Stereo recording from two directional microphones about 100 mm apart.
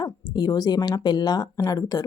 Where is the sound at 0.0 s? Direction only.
45° left (ahead or behind).